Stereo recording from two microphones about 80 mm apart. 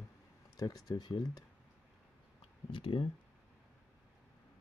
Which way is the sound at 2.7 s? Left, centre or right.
Left.